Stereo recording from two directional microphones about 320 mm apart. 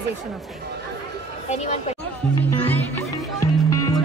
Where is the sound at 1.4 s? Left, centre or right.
Left.